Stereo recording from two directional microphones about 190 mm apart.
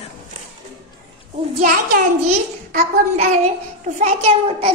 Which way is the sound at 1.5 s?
50° right (ahead or behind).